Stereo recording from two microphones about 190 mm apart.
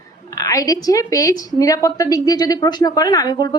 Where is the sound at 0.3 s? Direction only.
20° left (ahead or behind).